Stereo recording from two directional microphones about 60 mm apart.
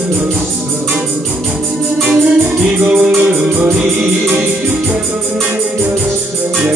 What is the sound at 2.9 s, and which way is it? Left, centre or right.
Music, right.